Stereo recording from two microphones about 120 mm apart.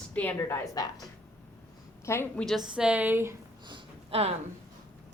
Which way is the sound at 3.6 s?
40° right (ahead or behind).